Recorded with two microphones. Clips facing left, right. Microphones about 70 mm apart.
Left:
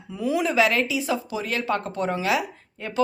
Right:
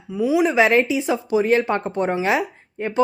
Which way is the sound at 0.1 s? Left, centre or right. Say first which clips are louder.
Right 6 dB; centre.